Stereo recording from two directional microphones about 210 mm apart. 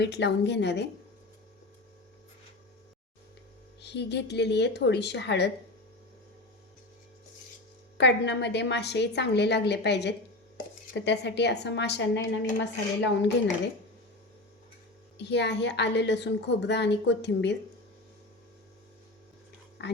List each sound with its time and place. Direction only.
0.0 s a woman's voice: 55° left (ahead or behind)
3.8 s a woman's voice: 55° left (ahead or behind)
7.9 s a woman's voice: 55° left (ahead or behind)
15.2 s a woman's voice: 55° left (ahead or behind)
19.8 s speech: 55° left (ahead or behind)